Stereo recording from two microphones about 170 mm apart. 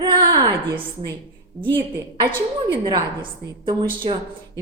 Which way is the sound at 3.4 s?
30° right (ahead or behind).